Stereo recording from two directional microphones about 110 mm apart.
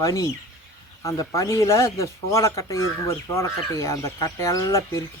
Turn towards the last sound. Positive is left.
turn(degrees=30)  # may be behind; listen again after turning